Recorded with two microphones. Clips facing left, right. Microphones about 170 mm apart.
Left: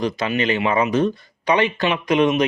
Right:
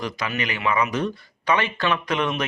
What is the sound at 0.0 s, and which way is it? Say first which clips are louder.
Speech: left 7 dB; 25° left (ahead or behind).